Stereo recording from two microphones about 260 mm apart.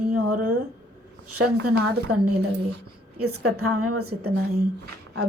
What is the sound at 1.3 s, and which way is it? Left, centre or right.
Speech, right.